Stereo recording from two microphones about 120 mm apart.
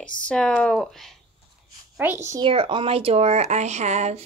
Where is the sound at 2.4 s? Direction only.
45° right (ahead or behind); by 4.2 s 70° right (ahead or behind).